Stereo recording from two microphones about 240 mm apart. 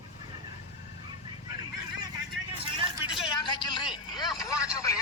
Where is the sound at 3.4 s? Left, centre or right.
Centre.